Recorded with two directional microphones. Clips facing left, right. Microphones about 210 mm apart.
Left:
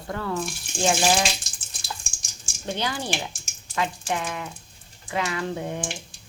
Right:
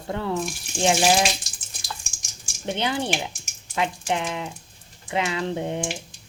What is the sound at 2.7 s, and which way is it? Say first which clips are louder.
A woman's voice: right 3 dB; 25° right (ahead or behind).